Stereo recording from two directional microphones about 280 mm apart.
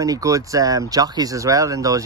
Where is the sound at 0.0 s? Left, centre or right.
Centre.